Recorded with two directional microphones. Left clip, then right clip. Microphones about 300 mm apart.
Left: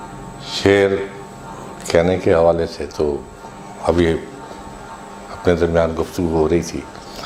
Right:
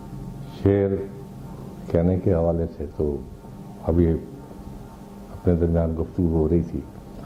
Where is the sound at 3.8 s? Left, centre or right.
Centre.